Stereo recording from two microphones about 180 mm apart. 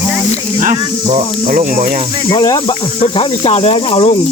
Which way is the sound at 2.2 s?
20° left (ahead or behind).